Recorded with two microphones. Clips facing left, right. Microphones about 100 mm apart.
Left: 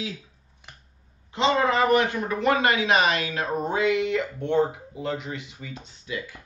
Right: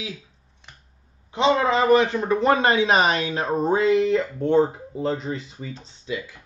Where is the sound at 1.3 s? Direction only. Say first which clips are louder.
Right 2 dB; 25° right (ahead or behind).